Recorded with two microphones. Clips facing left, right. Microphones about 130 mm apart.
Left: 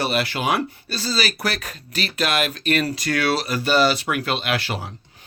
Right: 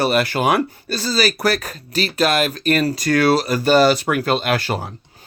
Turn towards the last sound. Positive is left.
turn(degrees=-45)  # may be behind; listen again after turning